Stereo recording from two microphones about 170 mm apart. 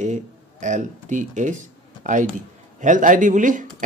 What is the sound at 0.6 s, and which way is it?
Speech, 45° right (ahead or behind).